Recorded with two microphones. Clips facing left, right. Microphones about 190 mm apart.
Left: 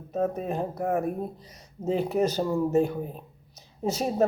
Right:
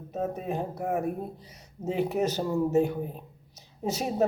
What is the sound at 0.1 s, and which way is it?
Speech, 15° right (ahead or behind).